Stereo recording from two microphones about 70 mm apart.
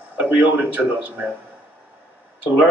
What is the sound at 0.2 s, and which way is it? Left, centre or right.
Speech, right.